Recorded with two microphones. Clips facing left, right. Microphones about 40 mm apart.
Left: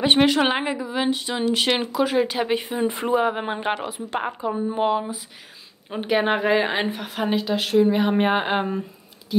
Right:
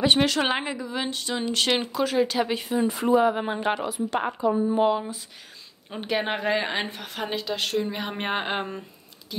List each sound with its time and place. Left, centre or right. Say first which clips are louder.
0.0 s a woman's voice: left 4 dB; left; by 8.8 s centre